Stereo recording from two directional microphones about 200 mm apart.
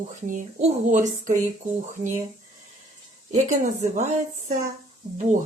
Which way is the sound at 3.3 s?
35° right (ahead or behind).